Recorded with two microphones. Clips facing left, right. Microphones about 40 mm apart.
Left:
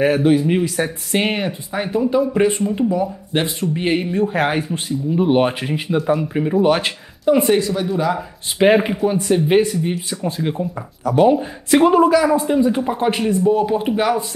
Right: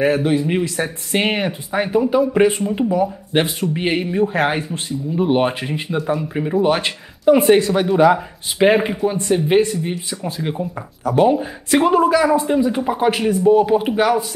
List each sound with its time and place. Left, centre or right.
0.0 s speech: centre; by 3.4 s right
3.7 s speech: centre
7.3 s speech: right
8.5 s speech: centre